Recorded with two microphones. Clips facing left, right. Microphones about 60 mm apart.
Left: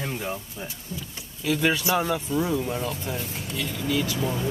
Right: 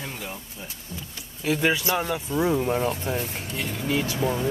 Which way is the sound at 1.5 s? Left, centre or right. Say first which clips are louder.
Right 1 dB; right.